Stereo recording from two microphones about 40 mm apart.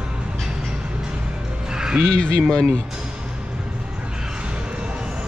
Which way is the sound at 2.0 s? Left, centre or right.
Left.